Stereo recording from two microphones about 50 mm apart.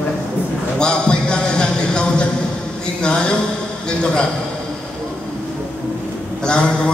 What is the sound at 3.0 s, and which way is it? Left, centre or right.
A man's voice, centre.